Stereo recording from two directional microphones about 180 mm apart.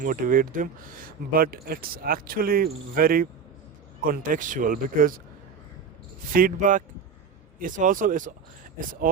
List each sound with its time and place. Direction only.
0.0 s speech: 50° right (ahead or behind)
6.3 s speech: 50° right (ahead or behind)